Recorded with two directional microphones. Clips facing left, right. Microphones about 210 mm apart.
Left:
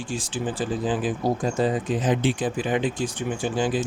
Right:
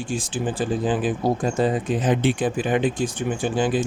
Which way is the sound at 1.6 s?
55° right (ahead or behind).